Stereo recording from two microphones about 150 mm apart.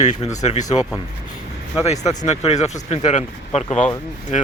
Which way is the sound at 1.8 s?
50° left (ahead or behind).